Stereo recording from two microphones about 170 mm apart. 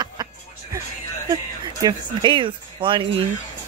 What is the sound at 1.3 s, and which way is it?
Speech, 25° right (ahead or behind).